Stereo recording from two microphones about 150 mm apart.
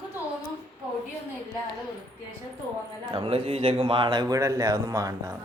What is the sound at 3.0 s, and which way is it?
A man's voice, 35° right (ahead or behind).